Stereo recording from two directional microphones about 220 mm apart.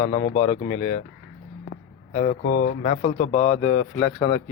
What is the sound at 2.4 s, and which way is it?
Speech, 45° left (ahead or behind).